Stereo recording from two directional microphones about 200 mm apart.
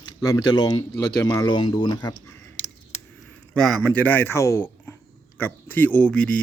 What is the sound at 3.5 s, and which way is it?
A man's voice, 5° left (ahead or behind).